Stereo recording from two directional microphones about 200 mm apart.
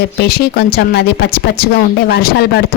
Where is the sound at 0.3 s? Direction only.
50° left (ahead or behind).